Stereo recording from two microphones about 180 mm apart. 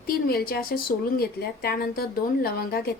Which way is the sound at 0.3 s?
60° left (ahead or behind).